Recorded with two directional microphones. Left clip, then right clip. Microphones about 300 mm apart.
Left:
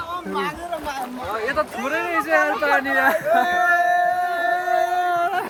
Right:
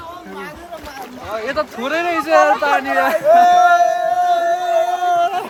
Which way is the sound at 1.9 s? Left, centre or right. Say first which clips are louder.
Right 6 dB; centre.